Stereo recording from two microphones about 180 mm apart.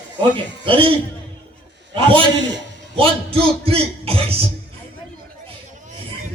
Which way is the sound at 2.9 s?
30° right (ahead or behind).